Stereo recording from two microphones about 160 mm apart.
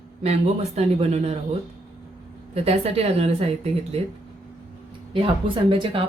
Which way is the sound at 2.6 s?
40° right (ahead or behind).